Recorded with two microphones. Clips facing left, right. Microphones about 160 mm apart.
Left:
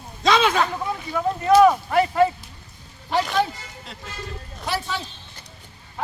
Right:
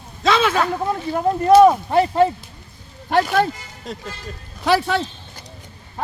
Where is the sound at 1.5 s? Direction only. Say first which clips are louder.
Right 3 dB; 35° right (ahead or behind).